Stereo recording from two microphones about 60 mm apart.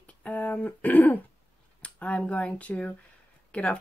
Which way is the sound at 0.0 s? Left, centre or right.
Left.